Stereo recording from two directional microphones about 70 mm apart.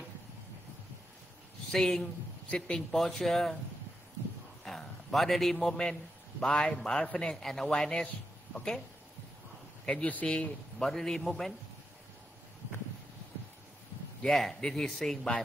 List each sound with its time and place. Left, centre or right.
1.7 s a man's voice: centre
4.6 s a man's voice: centre
10.0 s speech: centre
14.2 s a man's voice: centre